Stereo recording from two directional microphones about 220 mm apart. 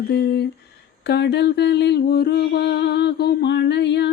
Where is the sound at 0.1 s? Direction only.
50° left (ahead or behind).